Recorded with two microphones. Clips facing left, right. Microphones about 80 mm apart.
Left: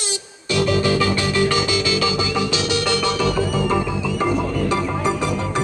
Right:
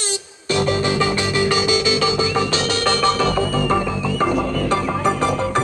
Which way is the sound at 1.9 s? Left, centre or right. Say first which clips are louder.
Right 2 dB; right.